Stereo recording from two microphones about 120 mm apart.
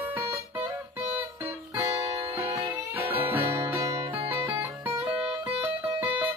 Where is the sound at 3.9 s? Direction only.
45° right (ahead or behind).